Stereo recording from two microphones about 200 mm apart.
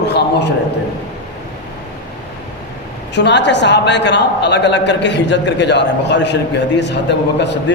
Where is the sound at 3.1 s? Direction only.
60° left (ahead or behind).